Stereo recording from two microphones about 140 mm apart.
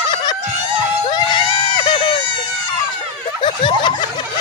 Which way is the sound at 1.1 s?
30° left (ahead or behind).